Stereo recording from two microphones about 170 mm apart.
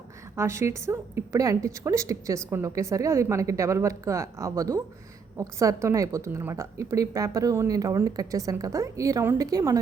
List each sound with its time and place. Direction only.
0.3 s a woman's voice: 15° right (ahead or behind)